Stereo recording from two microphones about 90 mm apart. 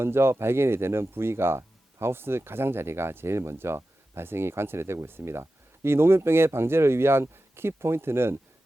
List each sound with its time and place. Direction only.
0.0 s speech: 30° right (ahead or behind)